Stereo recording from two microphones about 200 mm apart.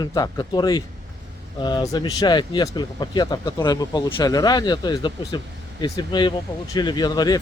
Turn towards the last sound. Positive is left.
turn(degrees=20)  # may be behind; listen again after turning